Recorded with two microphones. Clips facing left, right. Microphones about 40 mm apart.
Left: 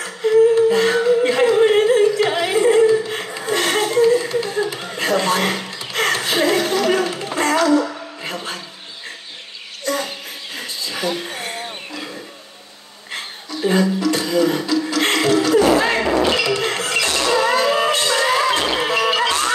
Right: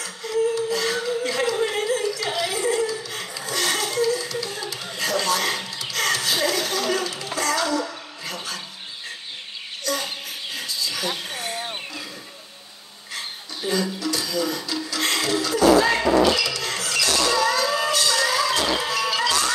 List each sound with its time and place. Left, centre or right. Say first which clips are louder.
0.0 s music: left 10 dB; left
9.9 s a sound: left 4 dB; left
13.7 s music: left 7 dB; left